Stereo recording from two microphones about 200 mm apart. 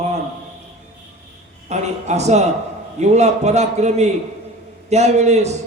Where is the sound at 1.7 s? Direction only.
35° right (ahead or behind).